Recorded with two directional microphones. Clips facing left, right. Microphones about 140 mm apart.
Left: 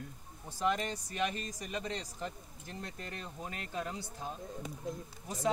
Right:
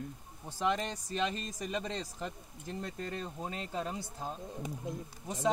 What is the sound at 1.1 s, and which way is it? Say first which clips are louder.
Speech: right 2 dB; 25° right (ahead or behind).